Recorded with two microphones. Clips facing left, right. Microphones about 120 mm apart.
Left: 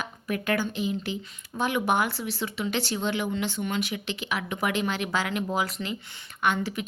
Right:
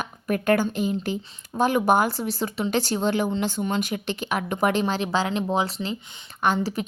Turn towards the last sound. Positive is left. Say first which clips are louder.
# right 3 dB
turn(degrees=-35)  # may be behind; listen again after turning